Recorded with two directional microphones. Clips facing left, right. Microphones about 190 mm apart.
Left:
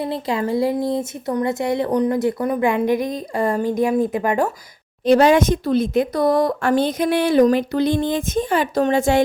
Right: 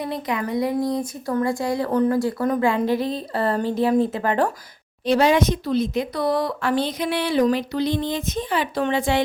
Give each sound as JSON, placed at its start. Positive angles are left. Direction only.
{"t": 0.0, "sound": "speech", "side_deg": 30}
{"t": 5.0, "sound": "speech", "side_deg": 50}